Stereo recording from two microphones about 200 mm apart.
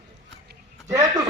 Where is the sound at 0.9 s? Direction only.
15° right (ahead or behind).